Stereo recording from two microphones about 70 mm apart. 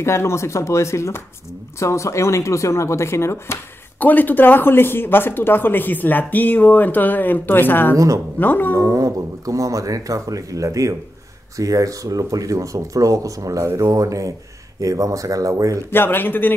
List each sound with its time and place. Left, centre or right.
0.0 s speech: left
4.0 s speech: left
8.7 s speech: right
15.9 s speech: left